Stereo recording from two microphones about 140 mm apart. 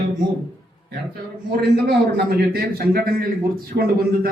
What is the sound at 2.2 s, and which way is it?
A man's voice, 90° right.